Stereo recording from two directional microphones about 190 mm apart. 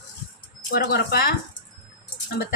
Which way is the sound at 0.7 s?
60° left (ahead or behind).